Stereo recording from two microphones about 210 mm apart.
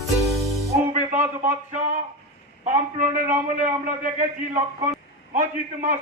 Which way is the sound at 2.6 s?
35° right (ahead or behind).